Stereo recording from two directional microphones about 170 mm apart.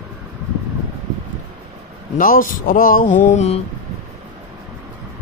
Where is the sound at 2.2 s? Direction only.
55° left (ahead or behind).